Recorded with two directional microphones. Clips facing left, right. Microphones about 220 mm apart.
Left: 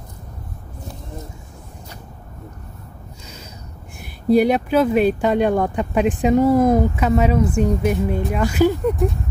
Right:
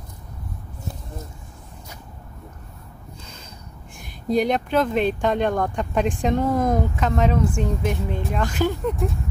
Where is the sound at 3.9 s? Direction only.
10° left (ahead or behind).